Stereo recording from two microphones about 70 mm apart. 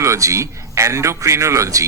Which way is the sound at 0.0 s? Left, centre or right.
Right.